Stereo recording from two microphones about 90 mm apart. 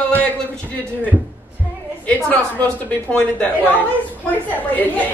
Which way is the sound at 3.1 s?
15° left (ahead or behind).